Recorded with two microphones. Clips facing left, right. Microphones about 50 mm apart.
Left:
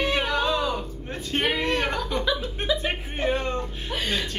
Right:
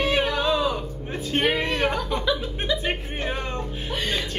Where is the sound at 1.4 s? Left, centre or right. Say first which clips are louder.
Right 1 dB; centre.